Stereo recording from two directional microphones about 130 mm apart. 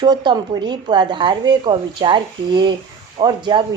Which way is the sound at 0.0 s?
35° right (ahead or behind).